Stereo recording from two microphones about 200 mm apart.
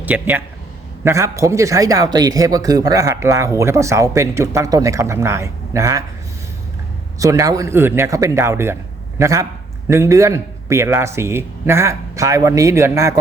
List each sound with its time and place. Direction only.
0.0 s a man's voice: 10° right (ahead or behind)
7.2 s a man's voice: 15° right (ahead or behind)